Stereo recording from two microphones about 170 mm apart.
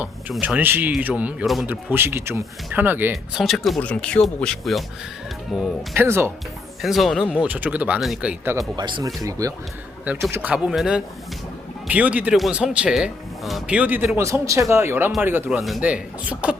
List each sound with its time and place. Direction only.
0.0 s speech: 10° right (ahead or behind)
3.4 s speech: centre (ahead or behind)
5.9 s speech: 15° right (ahead or behind)
6.8 s speech: centre (ahead or behind)
8.5 s speech: 25° right (ahead or behind)
10.3 s speech: 5° right (ahead or behind)